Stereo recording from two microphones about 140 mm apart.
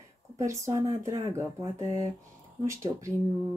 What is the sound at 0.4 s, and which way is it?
Speech, 20° right (ahead or behind).